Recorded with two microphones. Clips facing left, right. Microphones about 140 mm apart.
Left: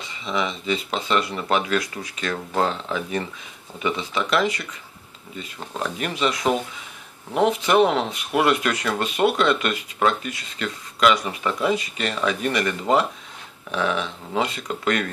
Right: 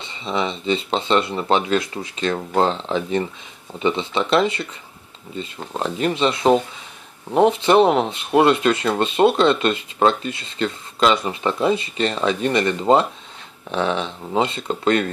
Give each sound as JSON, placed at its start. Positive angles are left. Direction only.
{"t": 0.0, "sound": "speech", "side_deg": -30}